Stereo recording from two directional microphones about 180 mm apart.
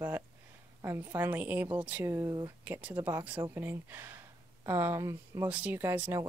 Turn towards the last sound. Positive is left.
turn(degrees=-10)  # may be behind; listen again after turning